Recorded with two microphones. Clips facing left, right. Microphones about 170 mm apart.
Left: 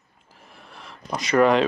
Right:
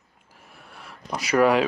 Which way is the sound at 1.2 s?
5° right (ahead or behind).